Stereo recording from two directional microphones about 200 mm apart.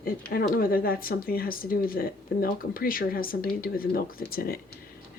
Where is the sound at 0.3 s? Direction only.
45° left (ahead or behind).